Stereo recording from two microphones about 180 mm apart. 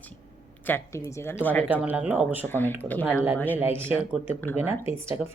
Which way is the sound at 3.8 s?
10° right (ahead or behind).